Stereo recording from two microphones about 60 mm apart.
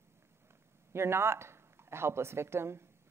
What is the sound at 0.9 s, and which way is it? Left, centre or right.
A woman's voice, right.